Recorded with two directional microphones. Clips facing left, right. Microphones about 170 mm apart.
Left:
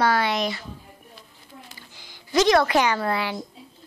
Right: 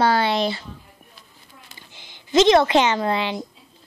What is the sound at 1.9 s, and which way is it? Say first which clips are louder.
A woman's voice: right 4 dB; 20° right (ahead or behind).